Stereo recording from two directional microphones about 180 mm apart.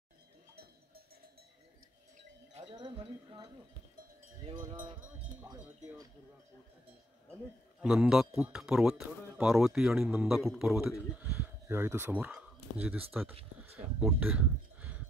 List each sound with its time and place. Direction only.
2.7 s speech: 25° right (ahead or behind)
4.5 s wind chime: 25° right (ahead or behind)
7.8 s speech: 5° right (ahead or behind)
11.3 s a sound: 15° right (ahead or behind)